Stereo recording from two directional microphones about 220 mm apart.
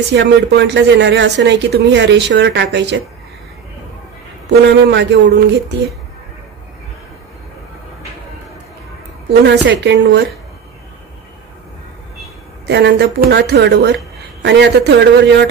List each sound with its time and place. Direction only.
0.1 s speech: 50° right (ahead or behind)
4.5 s speech: 50° right (ahead or behind)
9.4 s speech: 50° right (ahead or behind)
12.6 s speech: 50° right (ahead or behind)